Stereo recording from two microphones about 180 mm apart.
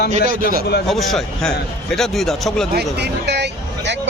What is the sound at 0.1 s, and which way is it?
Speech, 45° right (ahead or behind).